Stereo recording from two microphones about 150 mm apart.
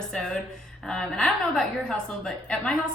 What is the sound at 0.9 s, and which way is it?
A woman's voice, 5° left (ahead or behind).